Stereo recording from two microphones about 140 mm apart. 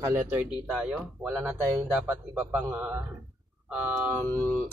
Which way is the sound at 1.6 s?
20° right (ahead or behind).